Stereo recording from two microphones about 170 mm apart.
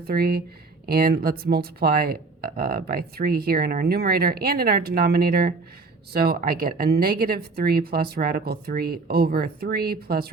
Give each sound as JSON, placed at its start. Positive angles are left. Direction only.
{"t": 0.0, "sound": "speech", "side_deg": -65}